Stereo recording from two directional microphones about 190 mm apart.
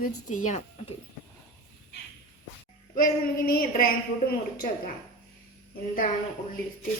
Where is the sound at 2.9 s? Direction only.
50° left (ahead or behind).